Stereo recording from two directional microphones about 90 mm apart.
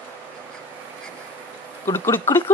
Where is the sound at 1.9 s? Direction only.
25° left (ahead or behind).